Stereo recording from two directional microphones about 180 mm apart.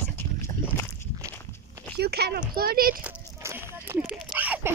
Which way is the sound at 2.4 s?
55° right (ahead or behind).